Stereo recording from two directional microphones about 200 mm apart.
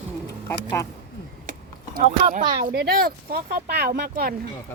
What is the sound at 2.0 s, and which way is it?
Speech, 35° right (ahead or behind).